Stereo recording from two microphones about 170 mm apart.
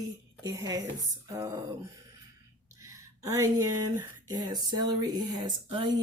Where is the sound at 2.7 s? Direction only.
20° right (ahead or behind).